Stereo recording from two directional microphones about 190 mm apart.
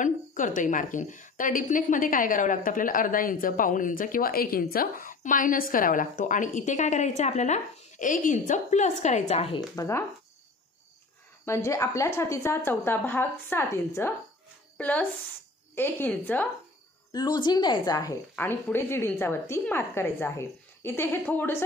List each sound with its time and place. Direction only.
0.0 s a woman's voice: 45° left (ahead or behind)
9.8 s a woman's voice: 15° left (ahead or behind)
11.4 s a woman's voice: 15° left (ahead or behind)
17.1 s a woman's voice: 20° left (ahead or behind)